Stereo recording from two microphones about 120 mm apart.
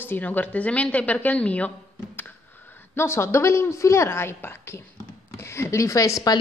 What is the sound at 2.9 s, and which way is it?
A woman's voice, 20° left (ahead or behind).